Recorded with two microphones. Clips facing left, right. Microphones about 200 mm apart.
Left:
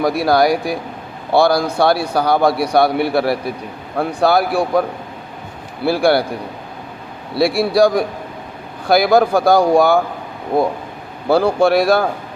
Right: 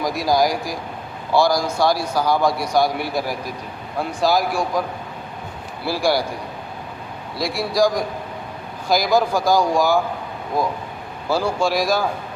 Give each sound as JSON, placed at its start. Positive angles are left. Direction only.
{"t": 0.0, "sound": "a man's voice", "side_deg": 65}
{"t": 7.3, "sound": "a man's voice", "side_deg": 65}